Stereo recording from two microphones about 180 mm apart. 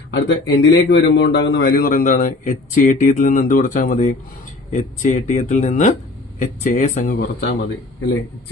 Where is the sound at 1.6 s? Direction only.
50° left (ahead or behind).